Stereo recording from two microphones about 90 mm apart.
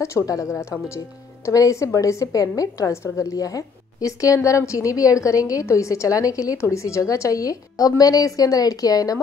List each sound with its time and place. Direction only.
0.0 s speech: 40° left (ahead or behind)